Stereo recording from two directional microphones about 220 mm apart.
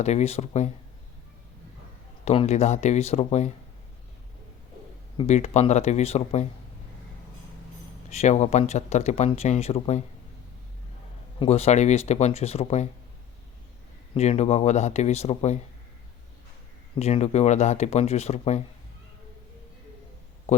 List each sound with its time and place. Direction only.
0.0 s speech: 30° left (ahead or behind)
2.2 s speech: 25° left (ahead or behind)
5.1 s speech: 30° left (ahead or behind)
8.1 s speech: 30° left (ahead or behind)
11.3 s speech: 30° left (ahead or behind)
14.1 s speech: 30° left (ahead or behind)
17.0 s speech: 30° left (ahead or behind)